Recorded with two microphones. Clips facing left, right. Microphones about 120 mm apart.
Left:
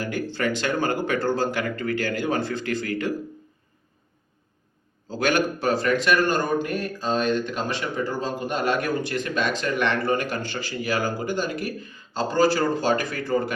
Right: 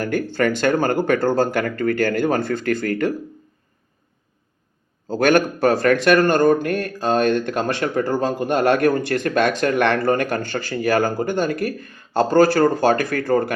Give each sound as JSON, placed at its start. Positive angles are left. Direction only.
{"t": 0.0, "sound": "speech", "side_deg": -55}
{"t": 5.0, "sound": "speech", "side_deg": -50}